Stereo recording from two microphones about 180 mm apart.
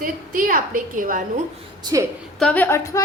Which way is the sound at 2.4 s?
5° left (ahead or behind).